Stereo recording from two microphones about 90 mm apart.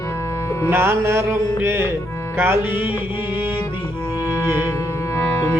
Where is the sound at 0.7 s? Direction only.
25° right (ahead or behind).